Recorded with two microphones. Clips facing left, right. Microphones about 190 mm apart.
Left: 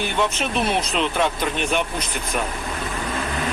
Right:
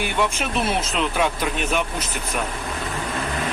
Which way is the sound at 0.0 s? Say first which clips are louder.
Even; 5° right (ahead or behind).